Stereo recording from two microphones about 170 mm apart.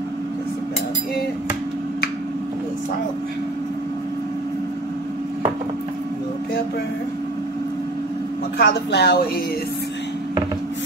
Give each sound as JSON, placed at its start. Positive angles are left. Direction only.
{"t": 8.5, "sound": "speech", "side_deg": 75}